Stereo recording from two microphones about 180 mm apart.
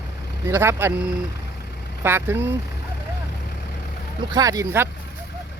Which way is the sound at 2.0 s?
15° right (ahead or behind).